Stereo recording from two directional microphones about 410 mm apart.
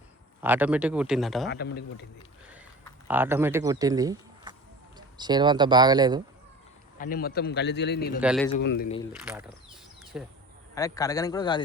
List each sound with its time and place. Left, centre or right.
0.4 s speech: centre
1.5 s a man's voice: left
3.1 s speech: centre
7.0 s a man's voice: left
8.2 s speech: centre
8.5 s a man's voice: left
9.2 s speech: centre
10.8 s a man's voice: centre